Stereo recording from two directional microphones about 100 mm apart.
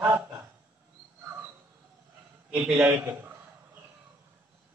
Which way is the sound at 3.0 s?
20° right (ahead or behind).